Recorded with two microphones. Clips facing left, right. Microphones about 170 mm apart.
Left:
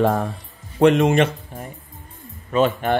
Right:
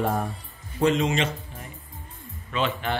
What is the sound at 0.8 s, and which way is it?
Speech, 65° left (ahead or behind).